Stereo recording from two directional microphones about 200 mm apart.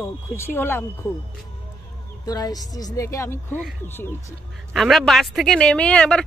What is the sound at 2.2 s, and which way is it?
A woman's voice, 20° left (ahead or behind).